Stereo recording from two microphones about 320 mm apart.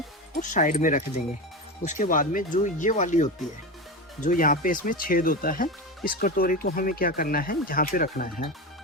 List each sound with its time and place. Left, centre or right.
0.3 s speech: left